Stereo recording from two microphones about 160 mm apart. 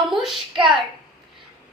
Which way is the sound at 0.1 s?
Centre (ahead or behind).